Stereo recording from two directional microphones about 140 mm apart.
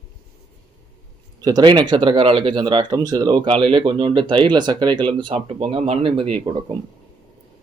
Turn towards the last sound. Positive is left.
turn(degrees=-30)  # may be behind; listen again after turning